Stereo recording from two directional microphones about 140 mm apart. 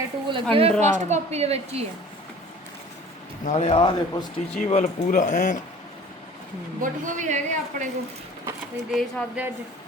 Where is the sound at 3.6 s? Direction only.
35° left (ahead or behind).